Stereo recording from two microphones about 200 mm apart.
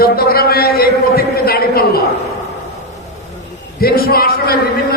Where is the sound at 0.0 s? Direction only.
50° left (ahead or behind).